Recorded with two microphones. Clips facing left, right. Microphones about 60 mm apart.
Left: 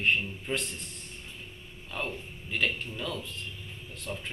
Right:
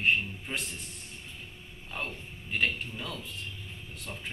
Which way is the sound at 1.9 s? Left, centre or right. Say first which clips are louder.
Left 2 dB; centre.